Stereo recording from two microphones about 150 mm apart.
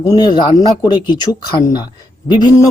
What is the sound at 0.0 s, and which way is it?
Speech, 25° left (ahead or behind).